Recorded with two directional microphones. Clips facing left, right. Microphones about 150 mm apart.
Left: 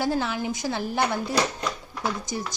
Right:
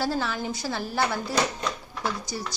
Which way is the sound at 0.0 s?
15° left (ahead or behind).